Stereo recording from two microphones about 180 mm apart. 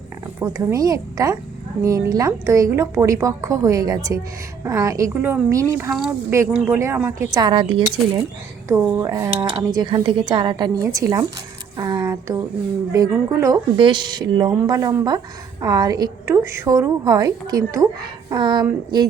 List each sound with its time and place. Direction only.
0.3 s a woman's voice: 15° right (ahead or behind)
5.9 s speech: 5° right (ahead or behind)
6.7 s a woman's voice: 15° right (ahead or behind)
7.3 s a woman's voice: 25° right (ahead or behind)
11.8 s a sound: 20° right (ahead or behind)
12.9 s a woman's voice: 20° right (ahead or behind)